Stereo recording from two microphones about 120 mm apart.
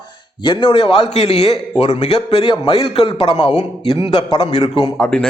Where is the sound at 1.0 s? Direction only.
60° left (ahead or behind).